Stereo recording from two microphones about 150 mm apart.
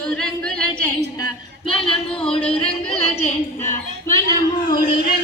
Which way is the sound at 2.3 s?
35° left (ahead or behind).